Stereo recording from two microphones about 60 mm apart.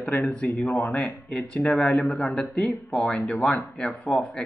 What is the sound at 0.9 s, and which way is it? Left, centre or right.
Speech, left.